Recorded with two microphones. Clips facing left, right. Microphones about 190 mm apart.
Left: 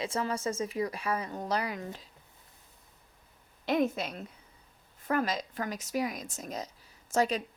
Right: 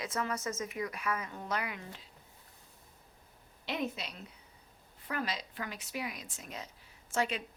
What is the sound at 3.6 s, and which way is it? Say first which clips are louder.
A woman's voice: left 8 dB; 50° left (ahead or behind).